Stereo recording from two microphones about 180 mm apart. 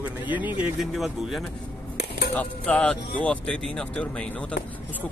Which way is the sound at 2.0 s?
65° left (ahead or behind).